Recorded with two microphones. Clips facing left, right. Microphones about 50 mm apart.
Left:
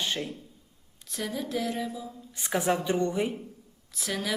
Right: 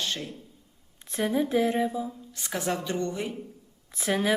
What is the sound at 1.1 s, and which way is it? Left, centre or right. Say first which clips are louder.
Speech: right 7 dB; right.